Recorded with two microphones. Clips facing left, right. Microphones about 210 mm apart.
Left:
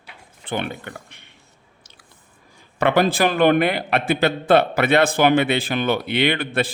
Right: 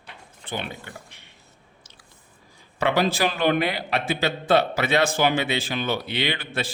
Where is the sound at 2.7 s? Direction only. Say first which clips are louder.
Left 4 dB; 55° left (ahead or behind).